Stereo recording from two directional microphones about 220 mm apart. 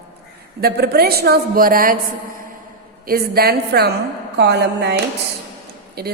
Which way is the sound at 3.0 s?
45° right (ahead or behind).